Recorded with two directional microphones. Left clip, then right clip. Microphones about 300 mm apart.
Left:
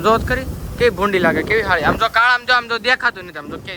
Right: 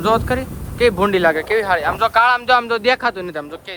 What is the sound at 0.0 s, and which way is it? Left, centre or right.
Speech, centre.